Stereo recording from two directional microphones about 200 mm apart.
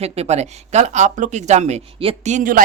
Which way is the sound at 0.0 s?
30° right (ahead or behind).